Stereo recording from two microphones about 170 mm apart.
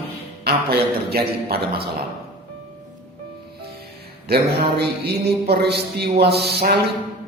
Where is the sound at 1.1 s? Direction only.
65° right (ahead or behind).